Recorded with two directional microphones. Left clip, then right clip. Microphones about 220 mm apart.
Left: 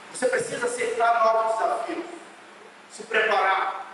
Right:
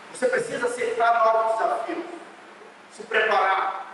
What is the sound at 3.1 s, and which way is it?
Speech, 10° right (ahead or behind).